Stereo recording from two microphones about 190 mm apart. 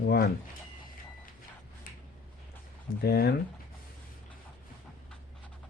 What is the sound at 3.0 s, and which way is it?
Speech, 55° left (ahead or behind).